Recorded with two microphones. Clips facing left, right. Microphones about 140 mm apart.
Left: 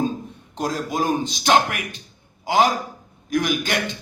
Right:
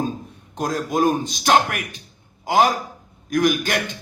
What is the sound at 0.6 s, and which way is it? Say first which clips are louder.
A man's voice: right 3 dB; 55° right (ahead or behind).